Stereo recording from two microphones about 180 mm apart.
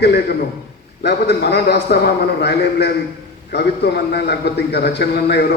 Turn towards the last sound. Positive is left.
turn(degrees=65)  # may be behind; listen again after turning